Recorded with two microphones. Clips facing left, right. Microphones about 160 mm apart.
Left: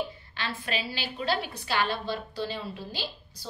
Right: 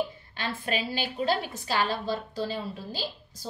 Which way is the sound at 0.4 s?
50° right (ahead or behind).